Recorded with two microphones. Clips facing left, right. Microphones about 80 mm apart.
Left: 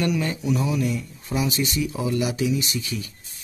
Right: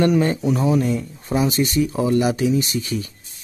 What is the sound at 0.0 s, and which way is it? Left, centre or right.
Speech, right.